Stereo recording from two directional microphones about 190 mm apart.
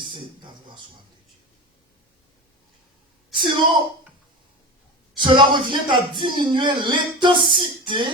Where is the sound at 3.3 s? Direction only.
25° right (ahead or behind).